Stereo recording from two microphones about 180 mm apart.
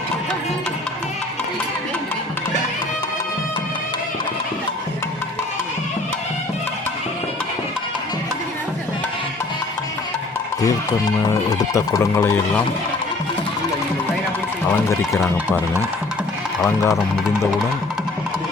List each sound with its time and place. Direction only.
11.7 s speech: 20° left (ahead or behind)
16.6 s speech: 10° left (ahead or behind)